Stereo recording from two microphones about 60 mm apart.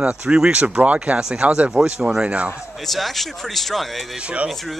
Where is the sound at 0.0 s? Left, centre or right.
Centre.